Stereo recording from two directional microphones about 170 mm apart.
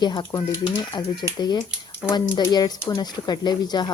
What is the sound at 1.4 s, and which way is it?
Speech, 25° left (ahead or behind).